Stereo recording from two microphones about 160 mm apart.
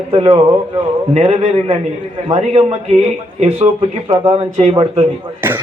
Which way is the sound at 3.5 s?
30° right (ahead or behind).